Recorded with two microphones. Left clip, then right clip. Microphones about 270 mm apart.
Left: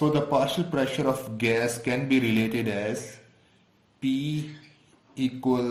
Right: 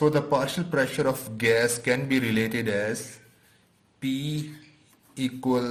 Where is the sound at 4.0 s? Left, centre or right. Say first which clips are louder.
Left 2 dB; right.